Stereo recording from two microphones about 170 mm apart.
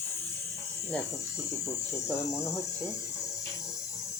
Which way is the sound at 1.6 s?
15° left (ahead or behind).